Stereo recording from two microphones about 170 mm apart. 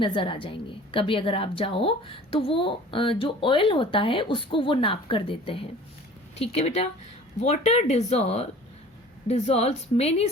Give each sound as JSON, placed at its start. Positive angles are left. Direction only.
{"t": 0.0, "sound": "a woman's voice", "side_deg": 30}